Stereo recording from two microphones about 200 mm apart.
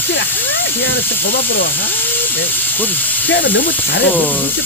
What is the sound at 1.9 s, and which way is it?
Speech, 10° left (ahead or behind).